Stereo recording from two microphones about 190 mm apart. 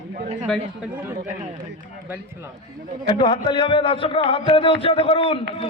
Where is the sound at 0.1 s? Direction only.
45° right (ahead or behind).